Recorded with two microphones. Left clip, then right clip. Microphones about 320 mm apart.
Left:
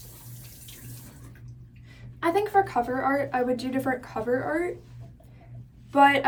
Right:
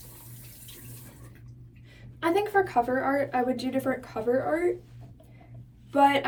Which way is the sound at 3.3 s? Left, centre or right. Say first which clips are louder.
Left 1 dB; centre.